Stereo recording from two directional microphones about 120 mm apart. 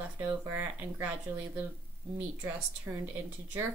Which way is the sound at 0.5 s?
25° right (ahead or behind).